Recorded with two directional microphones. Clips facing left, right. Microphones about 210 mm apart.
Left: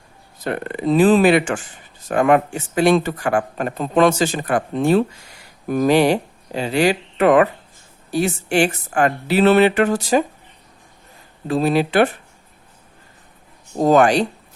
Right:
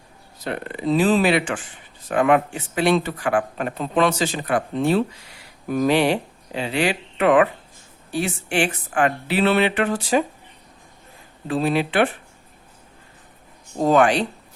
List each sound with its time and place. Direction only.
0.4 s speech: 50° left (ahead or behind)
11.4 s speech: 40° left (ahead or behind)
13.8 s speech: 40° left (ahead or behind)